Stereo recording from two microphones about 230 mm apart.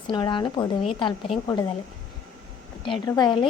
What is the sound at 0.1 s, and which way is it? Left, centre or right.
A woman's voice, left.